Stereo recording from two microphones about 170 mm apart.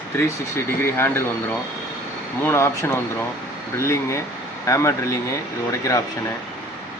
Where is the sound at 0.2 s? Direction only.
15° left (ahead or behind).